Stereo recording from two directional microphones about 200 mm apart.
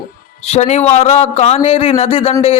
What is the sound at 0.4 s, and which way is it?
A man's voice, 35° left (ahead or behind).